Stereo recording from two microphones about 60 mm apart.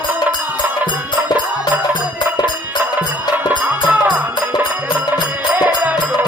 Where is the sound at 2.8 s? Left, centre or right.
Right.